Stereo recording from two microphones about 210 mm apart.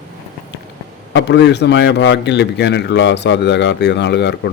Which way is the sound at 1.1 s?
55° left (ahead or behind).